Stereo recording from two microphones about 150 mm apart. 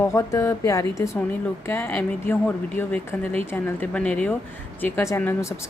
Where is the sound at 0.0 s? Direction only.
20° left (ahead or behind).